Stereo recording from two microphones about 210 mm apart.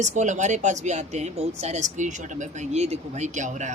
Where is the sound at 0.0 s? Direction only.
35° right (ahead or behind).